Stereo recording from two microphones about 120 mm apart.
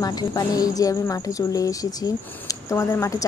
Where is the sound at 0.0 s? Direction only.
30° left (ahead or behind).